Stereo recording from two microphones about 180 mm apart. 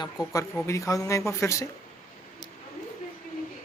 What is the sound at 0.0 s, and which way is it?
Speech, 20° left (ahead or behind).